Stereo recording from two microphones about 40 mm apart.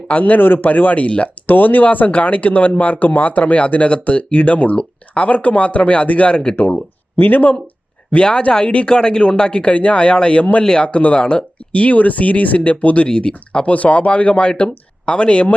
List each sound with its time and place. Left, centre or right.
0.1 s speech: left
1.5 s speech: left
6.6 s speech: left
8.1 s speech: left
10.6 s speech: centre
10.8 s speech: left
11.8 s speech: left
13.7 s speech: left